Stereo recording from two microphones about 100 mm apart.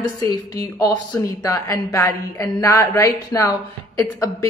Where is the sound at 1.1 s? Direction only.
35° left (ahead or behind).